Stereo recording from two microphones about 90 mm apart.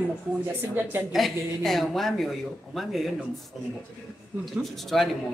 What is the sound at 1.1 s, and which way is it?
A woman's voice, centre (ahead or behind).